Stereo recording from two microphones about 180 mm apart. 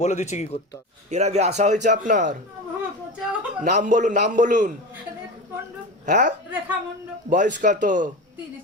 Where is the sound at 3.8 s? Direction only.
45° right (ahead or behind).